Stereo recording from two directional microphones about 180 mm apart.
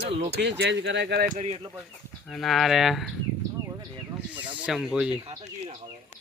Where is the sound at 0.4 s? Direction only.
75° right (ahead or behind).